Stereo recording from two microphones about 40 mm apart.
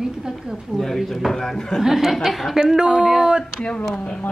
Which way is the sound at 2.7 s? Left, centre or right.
Centre.